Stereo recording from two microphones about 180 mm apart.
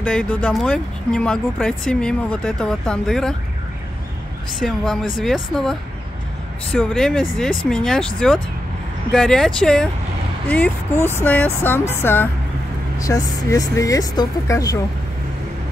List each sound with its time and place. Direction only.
0.0 s speech: 5° left (ahead or behind)
4.6 s speech: centre (ahead or behind)
9.1 s speech: 5° left (ahead or behind); by 14.8 s 20° left (ahead or behind)